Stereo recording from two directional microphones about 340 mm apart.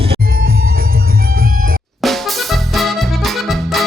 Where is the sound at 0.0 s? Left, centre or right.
Right.